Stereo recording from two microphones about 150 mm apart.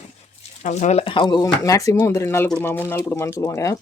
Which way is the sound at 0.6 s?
50° left (ahead or behind).